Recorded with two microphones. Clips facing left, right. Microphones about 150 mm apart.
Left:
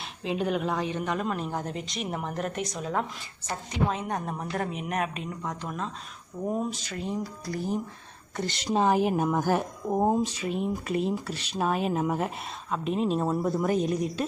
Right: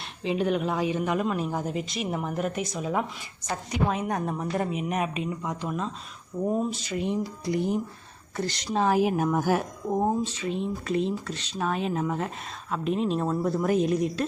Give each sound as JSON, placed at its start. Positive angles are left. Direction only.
{"t": 0.2, "sound": "a woman's voice", "side_deg": 0}
{"t": 7.4, "sound": "speech", "side_deg": -20}
{"t": 8.4, "sound": "a woman's voice", "side_deg": 0}
{"t": 9.9, "sound": "a woman's voice", "side_deg": 15}